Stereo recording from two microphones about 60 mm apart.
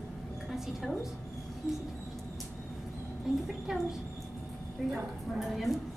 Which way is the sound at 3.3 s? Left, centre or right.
Centre.